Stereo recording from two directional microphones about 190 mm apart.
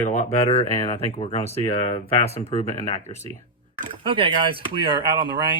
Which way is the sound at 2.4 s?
35° left (ahead or behind).